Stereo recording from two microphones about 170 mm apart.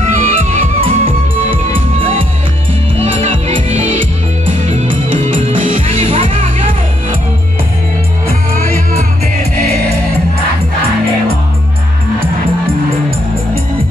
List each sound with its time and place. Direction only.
0.0 s music: 45° right (ahead or behind)
3.0 s music: 40° right (ahead or behind)
6.0 s music: 30° right (ahead or behind)